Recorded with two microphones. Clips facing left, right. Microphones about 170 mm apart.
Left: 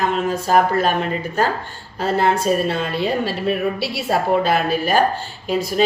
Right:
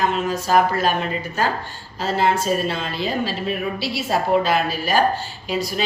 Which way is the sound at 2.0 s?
55° left (ahead or behind).